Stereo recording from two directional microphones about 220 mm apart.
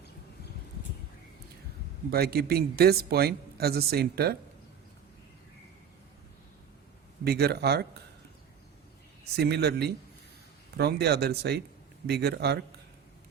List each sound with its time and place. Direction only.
2.0 s speech: 45° right (ahead or behind)
7.3 s speech: 45° right (ahead or behind)
9.3 s speech: 50° right (ahead or behind)